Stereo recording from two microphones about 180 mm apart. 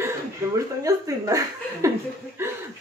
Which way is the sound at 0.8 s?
20° right (ahead or behind).